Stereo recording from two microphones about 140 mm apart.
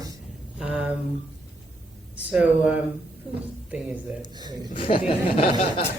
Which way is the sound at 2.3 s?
5° right (ahead or behind).